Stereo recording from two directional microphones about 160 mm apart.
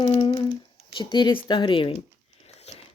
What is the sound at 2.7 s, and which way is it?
Biting, 45° left (ahead or behind).